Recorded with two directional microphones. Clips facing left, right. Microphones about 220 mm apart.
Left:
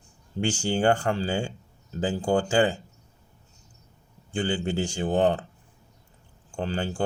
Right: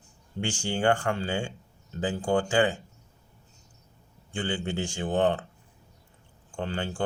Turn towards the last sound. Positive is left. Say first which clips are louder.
# left 3 dB
turn(degrees=35)  # may be behind; listen again after turning